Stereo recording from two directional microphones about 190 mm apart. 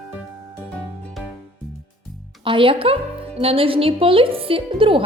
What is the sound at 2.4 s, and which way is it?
A woman's voice, 25° right (ahead or behind).